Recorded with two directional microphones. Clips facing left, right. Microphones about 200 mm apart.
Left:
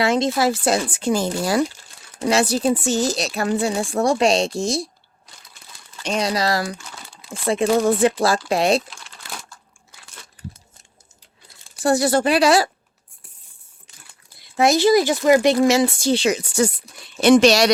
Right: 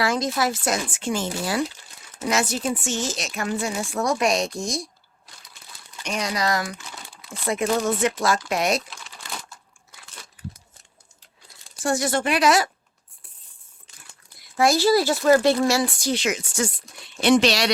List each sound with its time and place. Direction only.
0.0 s speech: 25° left (ahead or behind)
6.0 s speech: 30° left (ahead or behind)
11.8 s speech: 35° left (ahead or behind)
14.3 s speech: 25° left (ahead or behind)
17.2 s speech: 45° left (ahead or behind)